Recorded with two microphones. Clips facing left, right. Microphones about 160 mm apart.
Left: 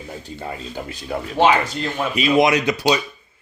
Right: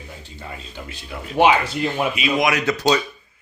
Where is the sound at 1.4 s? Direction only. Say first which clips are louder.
Right 1 dB; 15° right (ahead or behind).